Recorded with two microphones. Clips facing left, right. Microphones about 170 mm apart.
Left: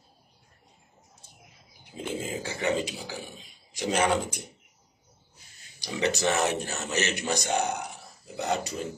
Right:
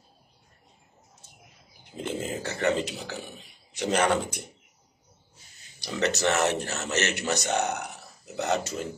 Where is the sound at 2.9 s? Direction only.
10° left (ahead or behind).